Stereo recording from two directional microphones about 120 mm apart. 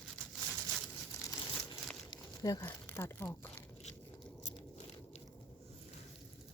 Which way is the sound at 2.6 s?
20° left (ahead or behind).